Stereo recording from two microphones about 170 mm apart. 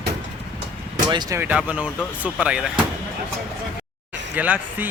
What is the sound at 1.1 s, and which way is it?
Speech, 25° right (ahead or behind).